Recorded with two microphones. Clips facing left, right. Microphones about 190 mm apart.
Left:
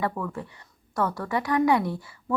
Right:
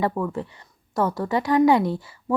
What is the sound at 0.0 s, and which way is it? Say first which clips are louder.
A woman's voice: right 5 dB; 30° right (ahead or behind).